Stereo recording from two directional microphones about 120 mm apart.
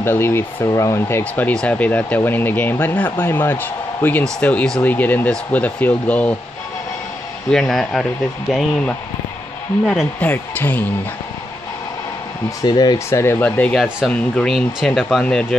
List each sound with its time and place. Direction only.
0.0 s speech: 20° left (ahead or behind)
7.5 s speech: 5° left (ahead or behind)
10.2 s speech: 15° left (ahead or behind)
12.4 s speech: 35° left (ahead or behind); by 13.7 s 15° left (ahead or behind)
13.8 s speech: 10° right (ahead or behind)
14.3 s speech: 5° left (ahead or behind)